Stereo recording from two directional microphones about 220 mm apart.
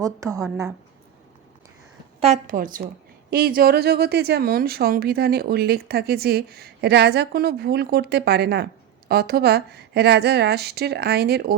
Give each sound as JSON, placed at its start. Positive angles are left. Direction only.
{"t": 0.0, "sound": "a woman's voice", "side_deg": -15}
{"t": 2.2, "sound": "a woman's voice", "side_deg": -35}